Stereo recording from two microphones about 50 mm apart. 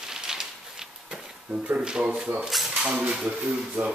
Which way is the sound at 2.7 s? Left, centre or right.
Centre.